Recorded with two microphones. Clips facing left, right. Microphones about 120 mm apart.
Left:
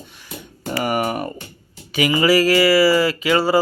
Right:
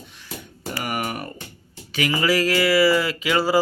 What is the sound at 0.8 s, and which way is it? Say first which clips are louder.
Speech: left 7 dB; 30° left (ahead or behind).